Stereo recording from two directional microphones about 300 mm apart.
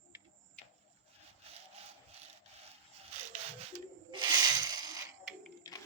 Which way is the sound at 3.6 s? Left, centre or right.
Centre.